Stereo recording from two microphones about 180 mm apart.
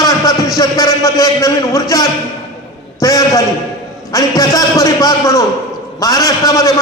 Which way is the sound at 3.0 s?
20° left (ahead or behind).